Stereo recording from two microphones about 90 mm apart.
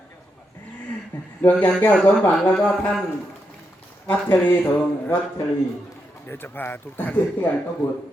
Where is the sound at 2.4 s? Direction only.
5° left (ahead or behind).